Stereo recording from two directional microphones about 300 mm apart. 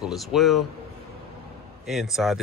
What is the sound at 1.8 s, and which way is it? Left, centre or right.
Speech, centre.